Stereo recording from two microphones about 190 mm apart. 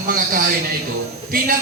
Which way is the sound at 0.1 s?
50° right (ahead or behind).